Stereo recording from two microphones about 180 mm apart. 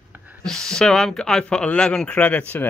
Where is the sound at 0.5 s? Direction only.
5° left (ahead or behind).